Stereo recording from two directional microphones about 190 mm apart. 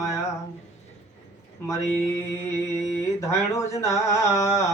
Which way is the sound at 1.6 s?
15° left (ahead or behind).